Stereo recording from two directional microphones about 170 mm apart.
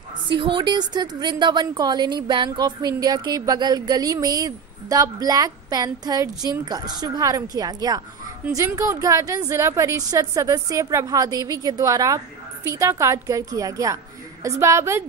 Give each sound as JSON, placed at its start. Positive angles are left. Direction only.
{"t": 0.3, "sound": "a woman's voice", "side_deg": -30}